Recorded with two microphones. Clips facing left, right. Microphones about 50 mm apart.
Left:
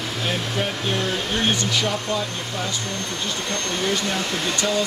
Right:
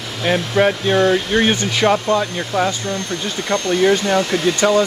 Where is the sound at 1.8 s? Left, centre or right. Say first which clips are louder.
Right 9 dB; right.